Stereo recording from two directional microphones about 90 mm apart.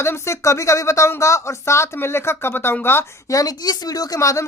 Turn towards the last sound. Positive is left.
turn(degrees=35)  # may be behind; listen again after turning